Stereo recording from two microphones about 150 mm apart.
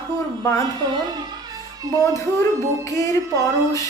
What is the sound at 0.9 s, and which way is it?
Music, 30° right (ahead or behind).